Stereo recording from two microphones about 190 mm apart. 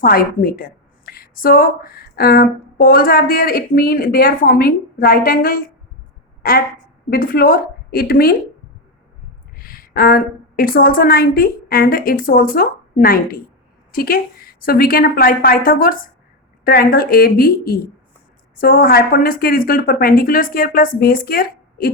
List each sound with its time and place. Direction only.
0.0 s a woman's voice: 50° left (ahead or behind)
9.6 s a woman's voice: 50° left (ahead or behind)